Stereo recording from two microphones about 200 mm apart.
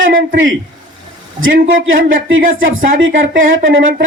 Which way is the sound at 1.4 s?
80° right.